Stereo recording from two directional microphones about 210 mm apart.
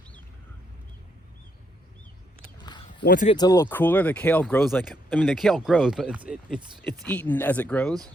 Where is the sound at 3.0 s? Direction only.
40° left (ahead or behind).